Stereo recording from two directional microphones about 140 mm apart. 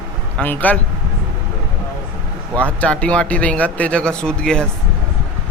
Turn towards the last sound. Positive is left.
turn(degrees=5)  # may be behind; listen again after turning